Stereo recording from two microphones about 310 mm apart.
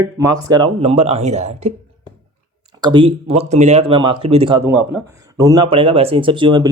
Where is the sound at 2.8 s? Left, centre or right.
Centre.